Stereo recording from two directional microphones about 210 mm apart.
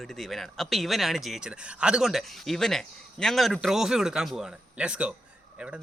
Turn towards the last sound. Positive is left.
turn(degrees=-5)  # may be behind; listen again after turning